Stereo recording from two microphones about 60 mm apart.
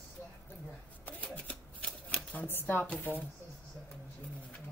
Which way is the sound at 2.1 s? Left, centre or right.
Left.